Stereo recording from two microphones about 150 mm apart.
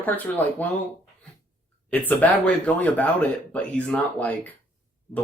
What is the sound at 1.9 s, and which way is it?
Speech, 10° left (ahead or behind).